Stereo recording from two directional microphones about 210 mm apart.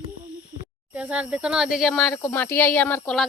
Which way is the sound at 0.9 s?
5° right (ahead or behind).